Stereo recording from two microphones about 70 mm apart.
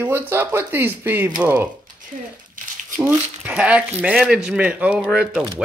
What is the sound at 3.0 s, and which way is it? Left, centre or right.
A man's voice, centre.